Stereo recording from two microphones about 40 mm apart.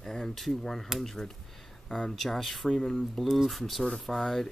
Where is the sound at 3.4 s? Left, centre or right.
Centre.